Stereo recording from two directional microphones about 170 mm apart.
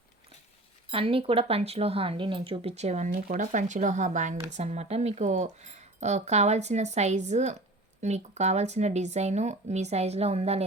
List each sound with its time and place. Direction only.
0.9 s speech: 30° right (ahead or behind)
3.1 s speech: 55° right (ahead or behind); by 10.6 s 40° right (ahead or behind)